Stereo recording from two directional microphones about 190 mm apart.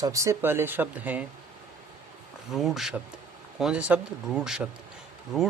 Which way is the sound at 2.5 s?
Centre (ahead or behind).